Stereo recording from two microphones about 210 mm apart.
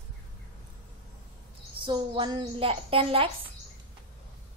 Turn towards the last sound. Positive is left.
turn(degrees=-25)  # may be behind; listen again after turning